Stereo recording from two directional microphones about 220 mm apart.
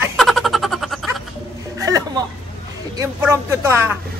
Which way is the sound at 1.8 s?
15° right (ahead or behind).